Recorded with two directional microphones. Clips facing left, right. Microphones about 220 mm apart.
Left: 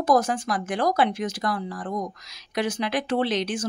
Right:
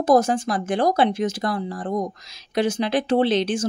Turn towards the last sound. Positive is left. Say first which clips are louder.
# right 5 dB
turn(degrees=-30)  # may be behind; listen again after turning